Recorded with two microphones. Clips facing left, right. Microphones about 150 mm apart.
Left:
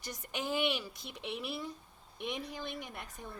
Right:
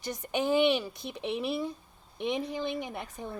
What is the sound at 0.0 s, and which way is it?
Speech, 60° right (ahead or behind).